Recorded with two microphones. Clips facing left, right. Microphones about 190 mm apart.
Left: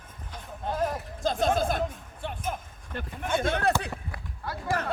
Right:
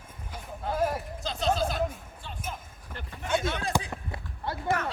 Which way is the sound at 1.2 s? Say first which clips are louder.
Left 3 dB; 50° left (ahead or behind).